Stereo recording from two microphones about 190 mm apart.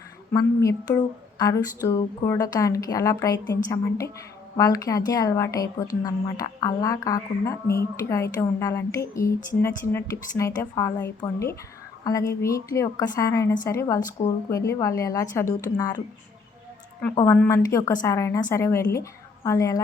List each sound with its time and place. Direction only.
0.3 s a woman's voice: 20° left (ahead or behind)
17.3 s a woman's voice: 10° left (ahead or behind)